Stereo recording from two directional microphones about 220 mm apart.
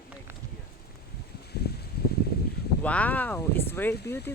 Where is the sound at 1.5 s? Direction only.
45° left (ahead or behind).